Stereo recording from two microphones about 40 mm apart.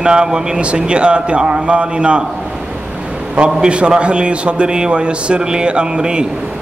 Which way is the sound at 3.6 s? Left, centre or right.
Right.